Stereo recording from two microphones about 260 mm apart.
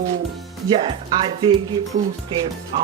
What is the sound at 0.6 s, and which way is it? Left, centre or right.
A woman's voice, centre.